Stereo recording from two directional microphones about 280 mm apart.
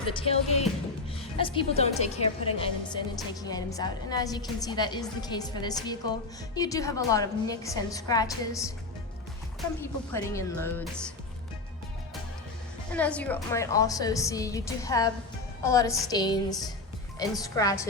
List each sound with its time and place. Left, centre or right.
0.1 s a woman's voice: left
12.9 s a woman's voice: centre